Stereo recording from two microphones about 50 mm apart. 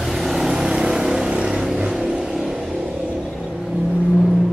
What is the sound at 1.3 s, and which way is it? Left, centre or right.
Vehicle, right.